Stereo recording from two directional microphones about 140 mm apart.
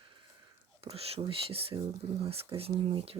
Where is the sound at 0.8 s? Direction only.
45° right (ahead or behind).